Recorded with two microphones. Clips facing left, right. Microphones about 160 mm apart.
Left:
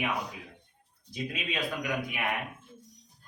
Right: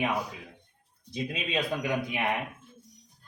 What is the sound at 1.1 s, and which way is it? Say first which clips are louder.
Speech: right 4 dB; 25° right (ahead or behind).